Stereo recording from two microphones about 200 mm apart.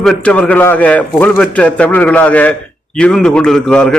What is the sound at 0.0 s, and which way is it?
A man's voice, 5° left (ahead or behind).